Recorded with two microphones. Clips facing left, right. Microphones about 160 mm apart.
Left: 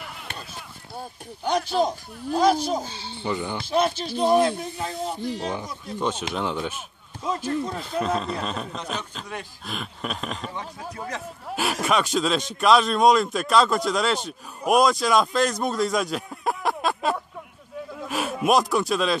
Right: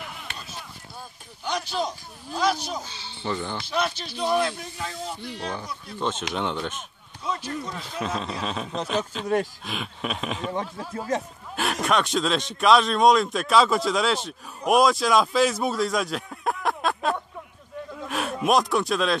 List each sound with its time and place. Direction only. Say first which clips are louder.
0.9 s speech: left 10 dB; 50° left (ahead or behind)
3.3 s speech: left 1 dB; 10° left (ahead or behind)
3.6 s speech: left 7 dB; 45° left (ahead or behind)
4.5 s speech: left 5 dB; 30° left (ahead or behind)
5.9 s speech: left 1 dB; 10° left (ahead or behind)
7.2 s speech: left 3 dB; 45° left (ahead or behind)
7.5 s speech: left 5 dB; 30° left (ahead or behind)
8.0 s speech: left 3 dB; centre (ahead or behind)
11.5 s speech: even; 5° left (ahead or behind)